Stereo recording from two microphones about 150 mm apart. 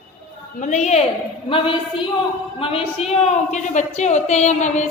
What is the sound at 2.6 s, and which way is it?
A woman's voice, 35° left (ahead or behind).